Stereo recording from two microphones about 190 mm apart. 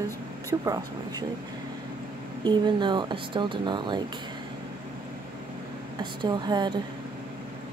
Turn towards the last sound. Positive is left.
turn(degrees=-20)  # may be behind; listen again after turning